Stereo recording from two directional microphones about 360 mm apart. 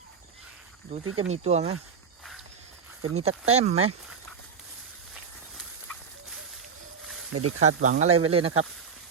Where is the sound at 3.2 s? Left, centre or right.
Centre.